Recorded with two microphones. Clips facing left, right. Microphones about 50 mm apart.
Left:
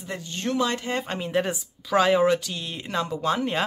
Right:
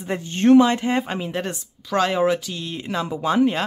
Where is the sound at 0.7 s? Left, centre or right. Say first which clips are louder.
Right 6 dB; centre.